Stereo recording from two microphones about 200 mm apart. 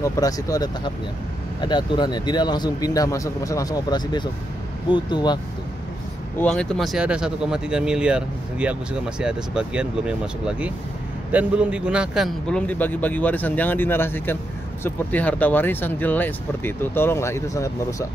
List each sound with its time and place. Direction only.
0.0 s a man's voice: 15° left (ahead or behind)
6.3 s a man's voice: 5° left (ahead or behind)